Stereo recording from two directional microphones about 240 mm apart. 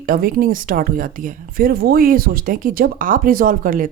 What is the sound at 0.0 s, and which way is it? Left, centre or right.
Speech, right.